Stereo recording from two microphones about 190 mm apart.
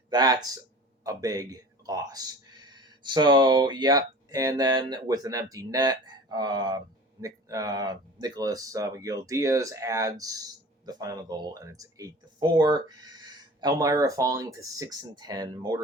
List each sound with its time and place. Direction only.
0.1 s speech: 20° right (ahead or behind)